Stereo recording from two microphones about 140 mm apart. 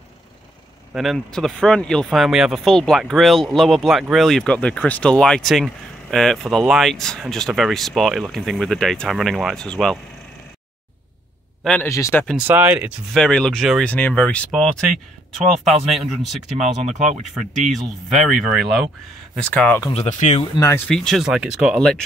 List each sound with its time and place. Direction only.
0.9 s speech: centre (ahead or behind)
11.6 s speech: 5° left (ahead or behind)
11.9 s speech: 15° left (ahead or behind)
12.4 s speech: 15° right (ahead or behind)
13.1 s speech: 5° left (ahead or behind)
17.6 s speech: centre (ahead or behind)
19.9 s speech: 55° left (ahead or behind)
20.5 s speech: 25° left (ahead or behind)
20.8 s speech: 5° left (ahead or behind)